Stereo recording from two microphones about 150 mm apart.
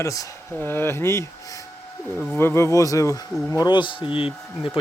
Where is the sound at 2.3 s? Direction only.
15° left (ahead or behind); by 4.7 s 35° left (ahead or behind).